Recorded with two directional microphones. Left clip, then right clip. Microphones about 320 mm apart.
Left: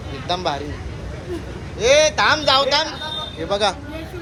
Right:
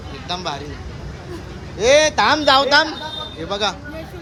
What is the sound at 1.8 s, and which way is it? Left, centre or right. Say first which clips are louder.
Speech: right 1 dB; right.